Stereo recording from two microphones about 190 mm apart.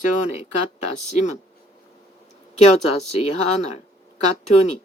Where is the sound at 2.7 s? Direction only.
35° left (ahead or behind).